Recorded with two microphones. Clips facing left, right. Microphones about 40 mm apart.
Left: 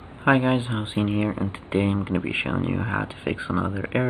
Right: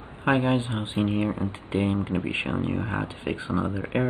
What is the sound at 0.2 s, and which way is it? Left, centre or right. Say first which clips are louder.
Speech: left 3 dB; centre.